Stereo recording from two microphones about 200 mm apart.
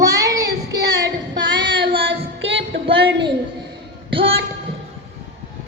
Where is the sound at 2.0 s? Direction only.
65° right (ahead or behind).